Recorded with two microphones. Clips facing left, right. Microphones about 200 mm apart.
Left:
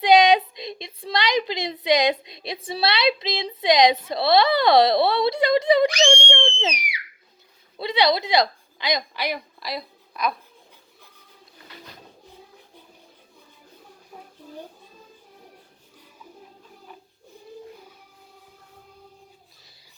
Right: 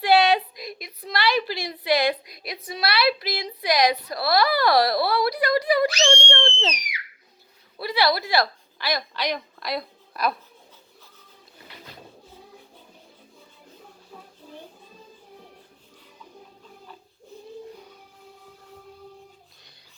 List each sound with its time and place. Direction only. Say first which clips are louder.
0.0 s a woman's voice: left 3 dB; 20° left (ahead or behind)
7.8 s a woman's voice: left 2 dB; 20° left (ahead or behind); by 10.3 s centre (ahead or behind)